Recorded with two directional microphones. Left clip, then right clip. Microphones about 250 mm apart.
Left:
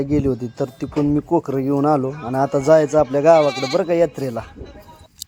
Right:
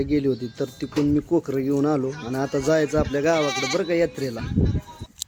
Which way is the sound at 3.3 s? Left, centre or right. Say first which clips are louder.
Left 7 dB; centre.